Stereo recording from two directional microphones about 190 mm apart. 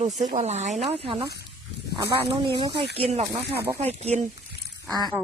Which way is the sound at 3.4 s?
60° right (ahead or behind).